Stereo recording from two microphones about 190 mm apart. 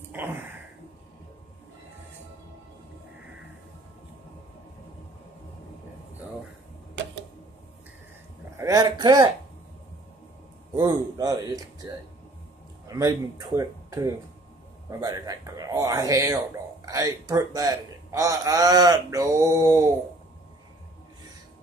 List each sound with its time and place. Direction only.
0.1 s a sound: 10° right (ahead or behind)
8.5 s speech: 20° right (ahead or behind)
10.8 s speech: 20° right (ahead or behind)